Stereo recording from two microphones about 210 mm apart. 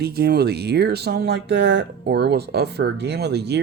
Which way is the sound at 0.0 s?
50° right (ahead or behind).